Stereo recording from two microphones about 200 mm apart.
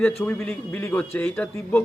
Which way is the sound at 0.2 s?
10° left (ahead or behind).